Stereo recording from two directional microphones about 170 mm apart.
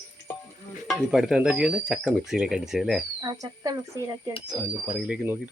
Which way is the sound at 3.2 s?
25° right (ahead or behind).